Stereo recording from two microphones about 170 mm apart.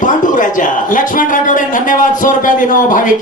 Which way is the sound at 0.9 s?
50° left (ahead or behind).